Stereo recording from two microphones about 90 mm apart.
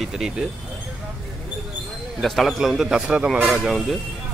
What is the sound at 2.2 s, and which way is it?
Speech, centre (ahead or behind).